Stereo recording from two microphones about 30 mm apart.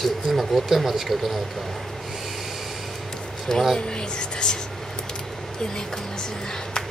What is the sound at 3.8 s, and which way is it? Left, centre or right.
Speech, left.